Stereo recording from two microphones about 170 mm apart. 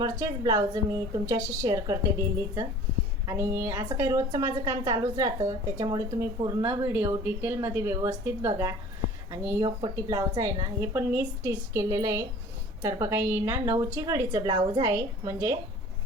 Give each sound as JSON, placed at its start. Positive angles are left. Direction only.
{"t": 0.0, "sound": "a woman's voice", "side_deg": -20}